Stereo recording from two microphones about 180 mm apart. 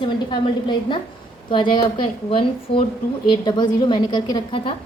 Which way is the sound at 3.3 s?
25° left (ahead or behind).